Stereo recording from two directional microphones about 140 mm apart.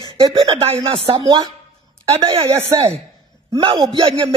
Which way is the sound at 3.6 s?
40° right (ahead or behind).